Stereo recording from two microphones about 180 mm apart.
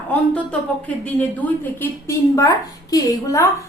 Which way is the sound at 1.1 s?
10° left (ahead or behind).